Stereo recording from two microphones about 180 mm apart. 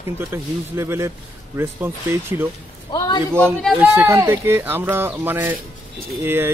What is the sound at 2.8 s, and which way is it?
Speech, 25° left (ahead or behind).